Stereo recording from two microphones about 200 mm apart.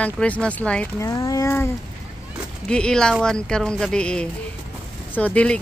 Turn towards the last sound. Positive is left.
turn(degrees=5)  # may be behind; listen again after turning